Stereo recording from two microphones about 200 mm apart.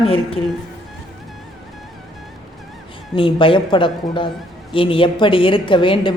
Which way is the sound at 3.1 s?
25° left (ahead or behind).